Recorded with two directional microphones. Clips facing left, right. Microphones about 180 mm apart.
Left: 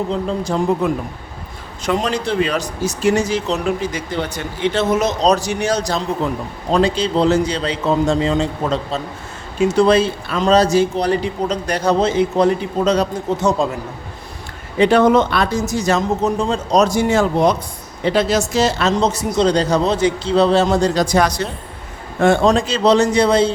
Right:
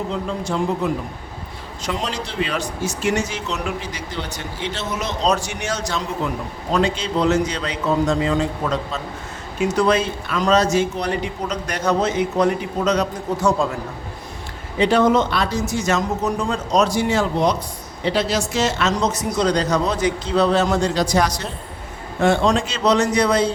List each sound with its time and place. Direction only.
0.1 s speech: 35° left (ahead or behind)
1.8 s speech: 55° left (ahead or behind); by 3.7 s 35° left (ahead or behind)
3.9 s speech: 55° left (ahead or behind); by 13.7 s 20° left (ahead or behind)
14.8 s a man's voice: 60° left (ahead or behind); by 16.6 s 25° left (ahead or behind)
16.7 s a man's voice: 45° left (ahead or behind)
22.2 s speech: 45° left (ahead or behind); by 23.5 s 25° left (ahead or behind)